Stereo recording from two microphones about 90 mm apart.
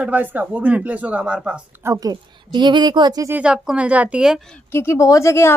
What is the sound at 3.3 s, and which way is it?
Speech, 10° right (ahead or behind).